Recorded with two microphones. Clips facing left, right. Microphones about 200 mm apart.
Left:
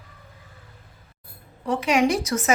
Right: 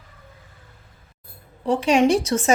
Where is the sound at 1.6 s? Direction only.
30° right (ahead or behind).